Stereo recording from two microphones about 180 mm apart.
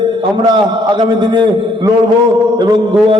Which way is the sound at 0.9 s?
25° right (ahead or behind).